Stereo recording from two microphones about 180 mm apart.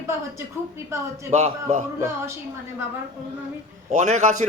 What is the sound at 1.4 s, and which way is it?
Speech, 40° right (ahead or behind).